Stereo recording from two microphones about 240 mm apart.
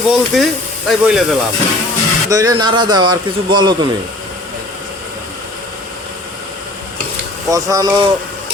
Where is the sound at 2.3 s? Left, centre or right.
Centre.